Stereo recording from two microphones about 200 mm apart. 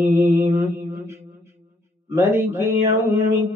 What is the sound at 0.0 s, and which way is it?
Mantra, 15° right (ahead or behind).